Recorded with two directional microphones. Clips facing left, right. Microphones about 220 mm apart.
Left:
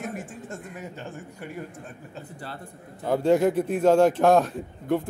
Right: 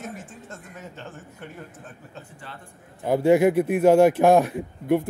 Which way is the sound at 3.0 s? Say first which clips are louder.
Right 3 dB; 10° right (ahead or behind).